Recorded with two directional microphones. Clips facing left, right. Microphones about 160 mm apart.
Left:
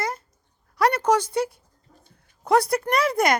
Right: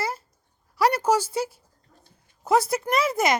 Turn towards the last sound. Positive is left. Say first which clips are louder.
# left 1 dB
turn(degrees=0)  # may be behind; listen again after turning